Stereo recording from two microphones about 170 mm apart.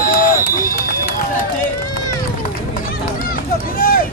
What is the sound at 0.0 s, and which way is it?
Run, 55° left (ahead or behind).